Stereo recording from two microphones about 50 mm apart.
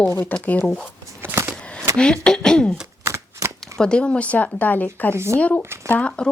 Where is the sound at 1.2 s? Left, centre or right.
Right.